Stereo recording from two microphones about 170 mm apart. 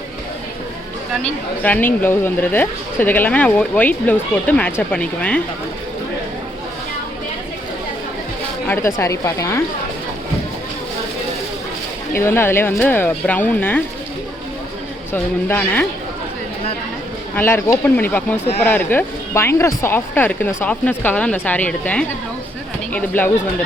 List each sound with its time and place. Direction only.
1.6 s speech: 10° left (ahead or behind)
8.6 s speech: 15° left (ahead or behind)
12.1 s speech: 15° left (ahead or behind)
15.1 s speech: 10° left (ahead or behind)
17.3 s speech: 15° left (ahead or behind)